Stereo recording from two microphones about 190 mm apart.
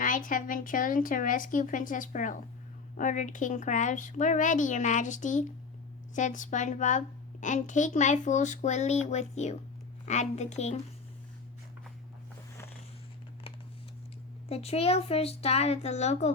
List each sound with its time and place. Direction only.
0.0 s a woman's voice: 45° left (ahead or behind)
14.5 s a woman's voice: 30° left (ahead or behind)